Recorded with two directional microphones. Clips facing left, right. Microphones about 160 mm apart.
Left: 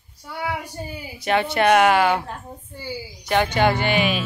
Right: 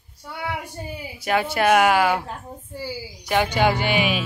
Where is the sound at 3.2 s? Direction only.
10° right (ahead or behind).